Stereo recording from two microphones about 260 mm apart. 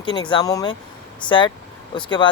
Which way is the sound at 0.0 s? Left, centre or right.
Centre.